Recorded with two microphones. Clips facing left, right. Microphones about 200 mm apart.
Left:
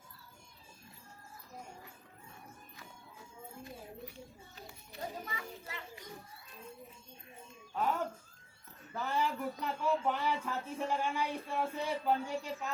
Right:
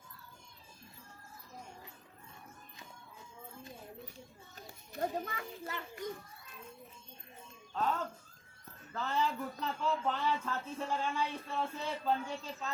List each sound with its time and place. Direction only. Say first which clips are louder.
4.5 s children playing: right 6 dB; 50° right (ahead or behind)
7.7 s music: even; 10° left (ahead or behind)
8.9 s speech: even; 10° left (ahead or behind)